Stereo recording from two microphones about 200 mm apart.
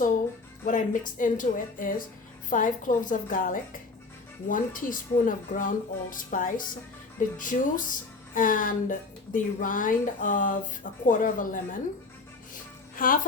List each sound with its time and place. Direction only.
0.6 s a woman's voice: 40° left (ahead or behind)
13.0 s speech: 45° left (ahead or behind)